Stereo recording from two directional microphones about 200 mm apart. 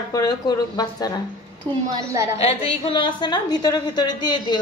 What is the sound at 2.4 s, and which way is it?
A woman's voice, 30° left (ahead or behind).